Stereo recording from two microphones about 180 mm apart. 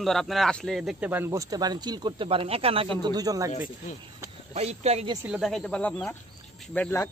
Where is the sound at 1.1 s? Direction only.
15° right (ahead or behind).